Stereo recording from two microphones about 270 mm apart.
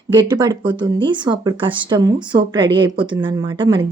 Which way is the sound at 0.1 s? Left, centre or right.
Centre.